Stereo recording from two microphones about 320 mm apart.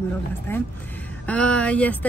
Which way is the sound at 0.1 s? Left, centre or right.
Centre.